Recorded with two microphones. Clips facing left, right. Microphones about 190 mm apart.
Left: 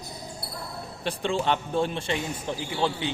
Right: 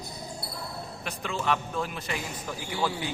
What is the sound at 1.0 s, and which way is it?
A man's voice, 30° left (ahead or behind).